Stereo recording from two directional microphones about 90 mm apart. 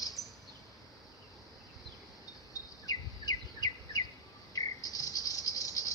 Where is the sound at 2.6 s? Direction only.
45° left (ahead or behind).